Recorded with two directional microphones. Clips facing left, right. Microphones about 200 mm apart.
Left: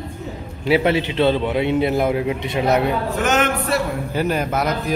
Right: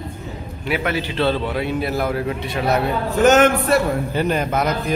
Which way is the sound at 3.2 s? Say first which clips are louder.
Right 8 dB; 45° right (ahead or behind).